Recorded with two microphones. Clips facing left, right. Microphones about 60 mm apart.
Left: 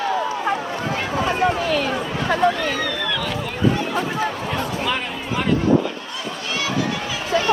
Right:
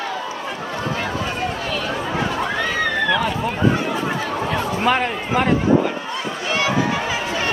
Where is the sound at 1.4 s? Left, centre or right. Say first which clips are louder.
Left 5 dB; left.